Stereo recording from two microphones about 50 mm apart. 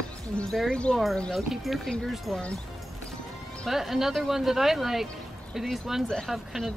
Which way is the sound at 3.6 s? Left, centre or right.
Centre.